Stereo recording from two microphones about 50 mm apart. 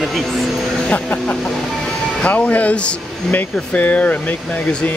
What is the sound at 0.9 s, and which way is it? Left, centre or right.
Speech, left.